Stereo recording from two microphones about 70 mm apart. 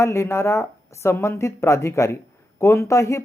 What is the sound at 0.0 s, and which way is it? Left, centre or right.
Speech, left.